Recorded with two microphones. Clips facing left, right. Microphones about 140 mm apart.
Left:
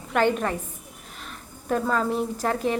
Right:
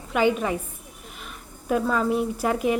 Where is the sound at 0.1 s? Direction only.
5° right (ahead or behind).